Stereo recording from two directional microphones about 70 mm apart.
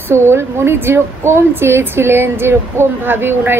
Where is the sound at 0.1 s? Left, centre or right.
Right.